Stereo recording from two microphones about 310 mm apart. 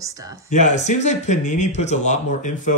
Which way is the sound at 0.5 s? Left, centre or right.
Left.